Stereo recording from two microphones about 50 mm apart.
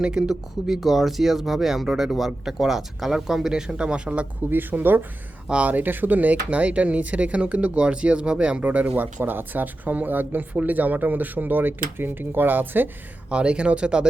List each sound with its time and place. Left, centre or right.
0.0 s speech: centre
0.8 s speech: centre; by 4.3 s right
4.4 s speech: right
5.5 s speech: right
5.7 s speech: right
13.3 s speech: right